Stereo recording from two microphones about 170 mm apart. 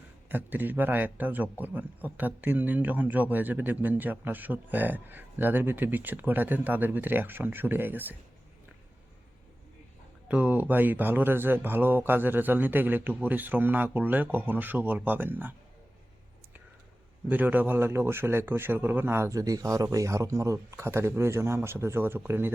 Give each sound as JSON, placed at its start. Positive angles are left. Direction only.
{"t": 0.3, "sound": "a man's voice", "side_deg": -10}
{"t": 10.2, "sound": "a man's voice", "side_deg": -10}
{"t": 17.2, "sound": "a man's voice", "side_deg": -10}